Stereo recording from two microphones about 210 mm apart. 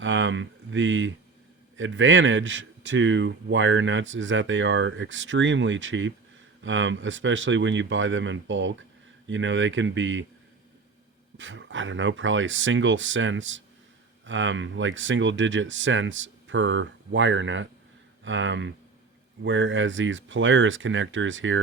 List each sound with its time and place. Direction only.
0.0 s a man's voice: 65° right (ahead or behind)
11.3 s a man's voice: 65° right (ahead or behind)